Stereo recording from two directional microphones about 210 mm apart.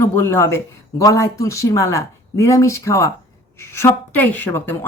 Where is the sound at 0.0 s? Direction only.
10° left (ahead or behind).